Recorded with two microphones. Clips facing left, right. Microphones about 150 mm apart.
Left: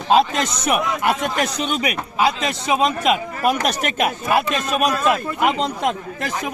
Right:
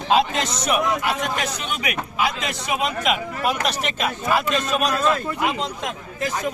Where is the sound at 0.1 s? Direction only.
40° left (ahead or behind).